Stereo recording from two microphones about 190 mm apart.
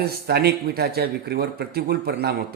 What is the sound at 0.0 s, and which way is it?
A man's voice, 55° right (ahead or behind).